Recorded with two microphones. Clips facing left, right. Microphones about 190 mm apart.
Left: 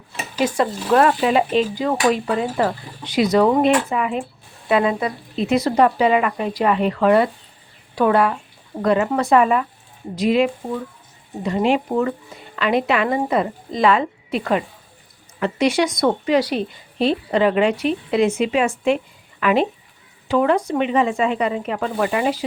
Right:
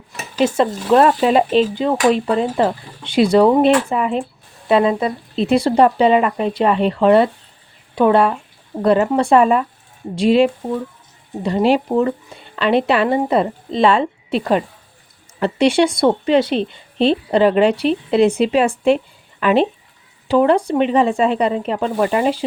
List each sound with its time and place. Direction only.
0.4 s a woman's voice: 25° right (ahead or behind)